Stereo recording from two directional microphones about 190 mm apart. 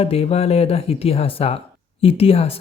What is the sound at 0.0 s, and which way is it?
Speech, 30° left (ahead or behind).